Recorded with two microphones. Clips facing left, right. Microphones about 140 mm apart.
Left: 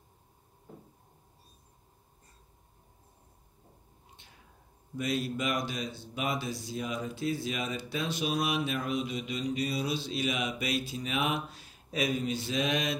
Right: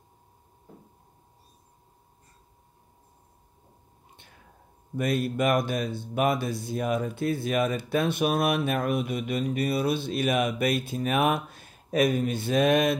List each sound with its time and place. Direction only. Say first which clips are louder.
4.9 s speech: right 5 dB; 55° right (ahead or behind)